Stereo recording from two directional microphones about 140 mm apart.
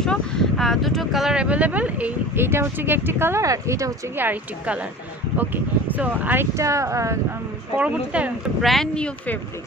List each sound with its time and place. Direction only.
0.0 s speech: 5° left (ahead or behind); by 7.2 s 20° right (ahead or behind)
7.7 s speech: 10° right (ahead or behind); by 9.4 s 5° left (ahead or behind)